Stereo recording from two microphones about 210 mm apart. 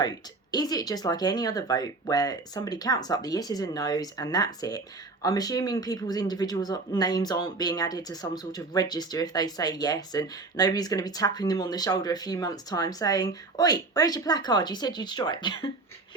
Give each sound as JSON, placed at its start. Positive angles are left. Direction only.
{"t": 0.5, "sound": "speech", "side_deg": 20}